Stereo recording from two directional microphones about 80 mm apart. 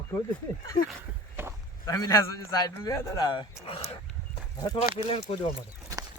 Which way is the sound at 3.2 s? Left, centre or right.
Left.